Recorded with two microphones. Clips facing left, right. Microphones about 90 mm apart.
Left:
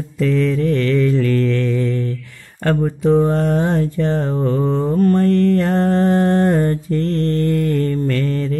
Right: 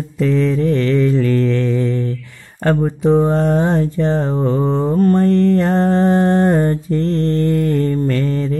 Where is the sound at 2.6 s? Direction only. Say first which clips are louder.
Right 2 dB; 25° right (ahead or behind).